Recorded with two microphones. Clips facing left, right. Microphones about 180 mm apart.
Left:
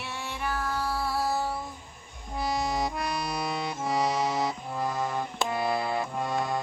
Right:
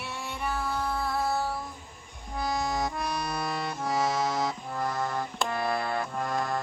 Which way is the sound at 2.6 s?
20° left (ahead or behind).